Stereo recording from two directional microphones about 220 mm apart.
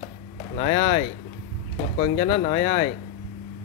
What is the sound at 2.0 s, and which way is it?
Speech, 25° left (ahead or behind).